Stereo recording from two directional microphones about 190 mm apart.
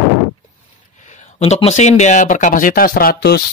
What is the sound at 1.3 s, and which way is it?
Speech, 35° left (ahead or behind).